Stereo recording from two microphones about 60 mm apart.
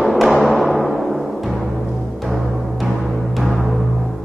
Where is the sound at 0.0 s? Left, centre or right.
Centre.